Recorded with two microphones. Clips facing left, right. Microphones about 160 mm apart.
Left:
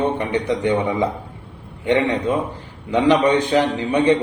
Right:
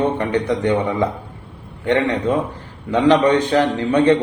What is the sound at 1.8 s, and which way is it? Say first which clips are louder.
A man's voice: right 1 dB; 15° left (ahead or behind).